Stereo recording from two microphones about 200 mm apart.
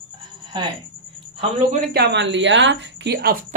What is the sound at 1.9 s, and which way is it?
Speech, 55° right (ahead or behind).